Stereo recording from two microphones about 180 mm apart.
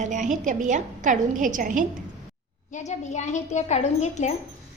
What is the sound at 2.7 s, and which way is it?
A woman's voice, 40° left (ahead or behind).